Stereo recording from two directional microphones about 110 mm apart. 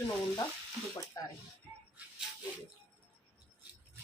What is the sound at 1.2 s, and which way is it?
Speech, 35° left (ahead or behind).